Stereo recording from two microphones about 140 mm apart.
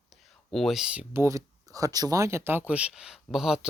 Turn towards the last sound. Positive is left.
turn(degrees=-5)  # may be behind; listen again after turning